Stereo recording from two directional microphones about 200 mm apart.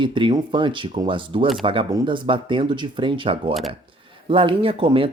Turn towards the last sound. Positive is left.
turn(degrees=-25)  # may be behind; listen again after turning